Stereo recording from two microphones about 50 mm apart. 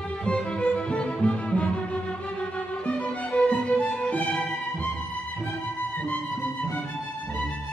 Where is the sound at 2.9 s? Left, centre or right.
Left.